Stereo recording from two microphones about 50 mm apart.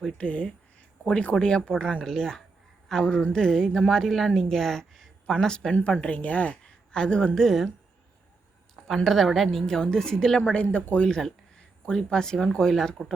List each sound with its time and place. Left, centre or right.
0.2 s a woman's voice: left
5.7 s a woman's voice: left
6.9 s a woman's voice: centre
9.0 s a woman's voice: centre
10.5 s a woman's voice: left; by 13.0 s centre